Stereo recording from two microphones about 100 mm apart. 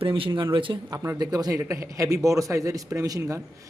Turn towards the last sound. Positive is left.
turn(degrees=-35)  # may be behind; listen again after turning